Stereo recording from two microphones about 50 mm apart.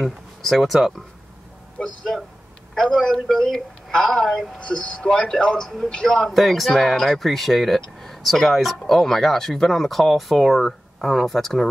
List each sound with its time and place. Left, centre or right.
0.4 s a woman's voice: centre
4.6 s speech: left
6.0 s speech: centre